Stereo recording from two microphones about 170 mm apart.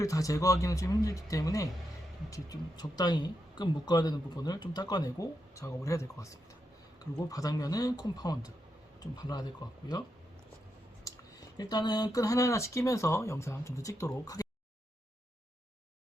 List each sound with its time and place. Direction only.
0.0 s speech: 20° left (ahead or behind)
7.3 s speech: 20° left (ahead or behind)
11.0 s speech: 20° left (ahead or behind)